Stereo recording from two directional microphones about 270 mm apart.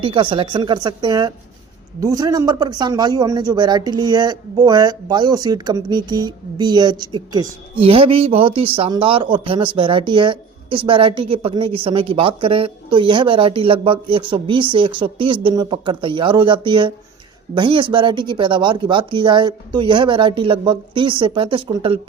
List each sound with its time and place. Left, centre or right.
0.0 s a man's voice: centre